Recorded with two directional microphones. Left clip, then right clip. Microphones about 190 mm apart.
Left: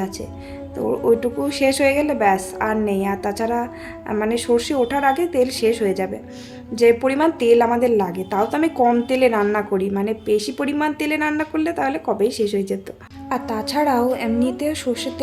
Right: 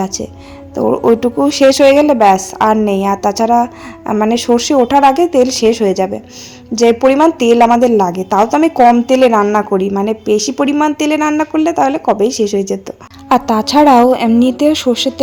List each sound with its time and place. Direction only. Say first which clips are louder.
0.0 s a woman's voice: right 8 dB; 35° right (ahead or behind)
13.2 s a woman's voice: right 12 dB; 40° right (ahead or behind)